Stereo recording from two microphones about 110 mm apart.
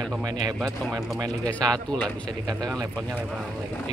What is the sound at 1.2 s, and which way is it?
Speech, 35° right (ahead or behind).